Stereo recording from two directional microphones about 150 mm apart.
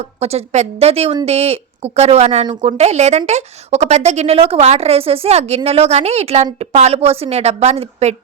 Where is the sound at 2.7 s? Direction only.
45° right (ahead or behind).